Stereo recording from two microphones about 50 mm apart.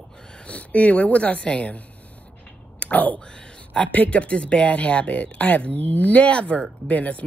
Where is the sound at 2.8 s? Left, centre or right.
Left.